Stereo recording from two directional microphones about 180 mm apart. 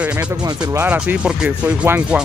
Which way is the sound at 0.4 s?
20° right (ahead or behind).